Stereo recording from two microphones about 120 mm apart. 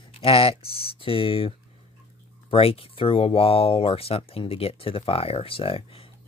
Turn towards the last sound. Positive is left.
turn(degrees=50)  # may be behind; listen again after turning